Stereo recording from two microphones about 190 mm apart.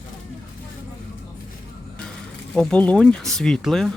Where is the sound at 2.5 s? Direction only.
5° left (ahead or behind).